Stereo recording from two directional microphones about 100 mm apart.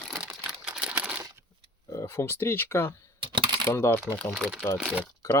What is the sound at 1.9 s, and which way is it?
Speech, 25° left (ahead or behind).